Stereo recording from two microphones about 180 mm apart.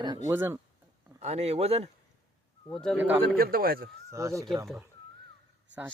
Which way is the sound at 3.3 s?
55° right (ahead or behind).